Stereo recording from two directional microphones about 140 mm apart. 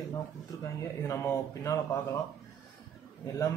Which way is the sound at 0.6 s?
20° left (ahead or behind).